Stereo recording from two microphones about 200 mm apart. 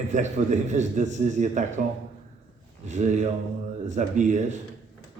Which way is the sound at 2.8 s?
35° right (ahead or behind).